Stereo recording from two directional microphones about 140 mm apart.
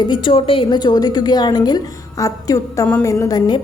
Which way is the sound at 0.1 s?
40° left (ahead or behind).